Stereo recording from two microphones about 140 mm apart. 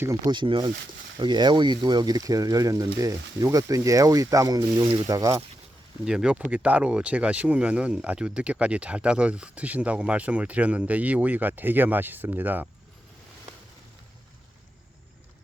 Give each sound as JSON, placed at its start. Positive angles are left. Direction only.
{"t": 0.3, "sound": "speech", "side_deg": -35}
{"t": 6.1, "sound": "speech", "side_deg": -5}